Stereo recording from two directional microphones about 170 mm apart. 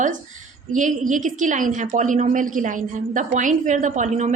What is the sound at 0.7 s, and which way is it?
A woman's voice, 50° right (ahead or behind).